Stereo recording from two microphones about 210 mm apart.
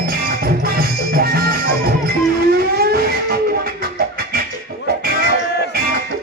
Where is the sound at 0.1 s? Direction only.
45° right (ahead or behind).